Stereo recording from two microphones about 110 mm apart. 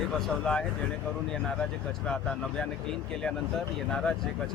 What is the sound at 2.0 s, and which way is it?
Speech, 10° left (ahead or behind).